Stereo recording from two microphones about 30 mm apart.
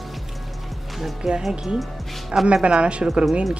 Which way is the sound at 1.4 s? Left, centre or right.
Centre.